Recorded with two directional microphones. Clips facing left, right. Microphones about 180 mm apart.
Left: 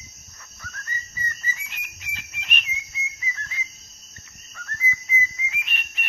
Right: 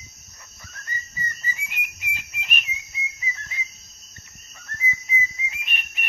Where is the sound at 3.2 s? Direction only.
15° right (ahead or behind).